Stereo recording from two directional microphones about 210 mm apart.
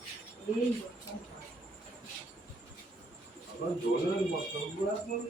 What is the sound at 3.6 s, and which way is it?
Speech, 50° left (ahead or behind).